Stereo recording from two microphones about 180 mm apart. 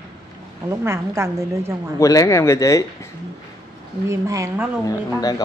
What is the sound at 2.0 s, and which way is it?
Speech, 20° left (ahead or behind).